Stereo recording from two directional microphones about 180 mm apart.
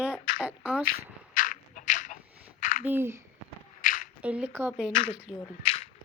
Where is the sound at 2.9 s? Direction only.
15° right (ahead or behind).